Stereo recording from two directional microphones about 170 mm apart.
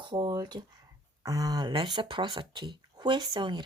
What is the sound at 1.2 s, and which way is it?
Speech, 20° right (ahead or behind).